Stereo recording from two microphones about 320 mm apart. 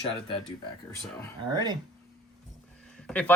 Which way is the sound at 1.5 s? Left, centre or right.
Centre.